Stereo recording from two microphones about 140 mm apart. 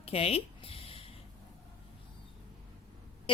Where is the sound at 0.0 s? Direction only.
45° left (ahead or behind).